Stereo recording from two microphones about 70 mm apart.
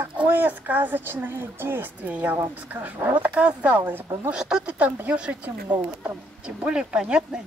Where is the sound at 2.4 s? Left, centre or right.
Right.